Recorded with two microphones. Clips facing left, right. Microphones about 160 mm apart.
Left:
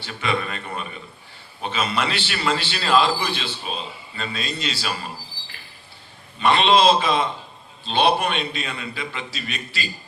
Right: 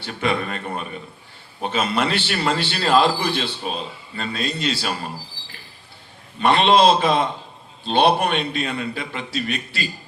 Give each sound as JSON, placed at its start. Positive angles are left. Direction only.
{"t": 0.0, "sound": "a man's voice", "side_deg": -50}
{"t": 6.4, "sound": "a man's voice", "side_deg": -55}